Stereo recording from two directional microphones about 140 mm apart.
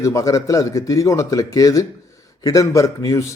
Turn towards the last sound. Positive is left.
turn(degrees=20)  # may be behind; listen again after turning